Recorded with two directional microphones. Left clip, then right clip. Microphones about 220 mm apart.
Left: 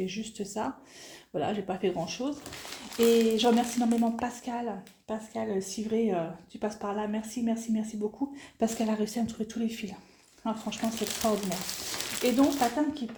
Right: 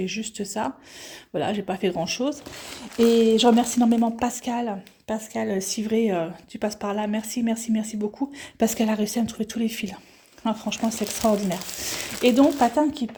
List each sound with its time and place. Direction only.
0.0 s speech: 35° right (ahead or behind)